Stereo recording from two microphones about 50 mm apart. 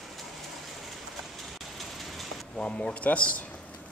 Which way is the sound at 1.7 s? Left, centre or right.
Centre.